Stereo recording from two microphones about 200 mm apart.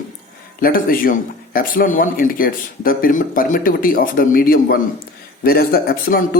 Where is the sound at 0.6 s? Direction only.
45° left (ahead or behind).